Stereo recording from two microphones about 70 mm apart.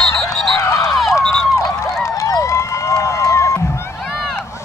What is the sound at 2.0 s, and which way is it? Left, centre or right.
Music, left.